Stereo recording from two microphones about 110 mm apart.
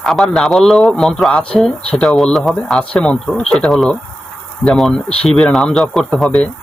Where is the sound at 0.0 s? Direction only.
Centre (ahead or behind).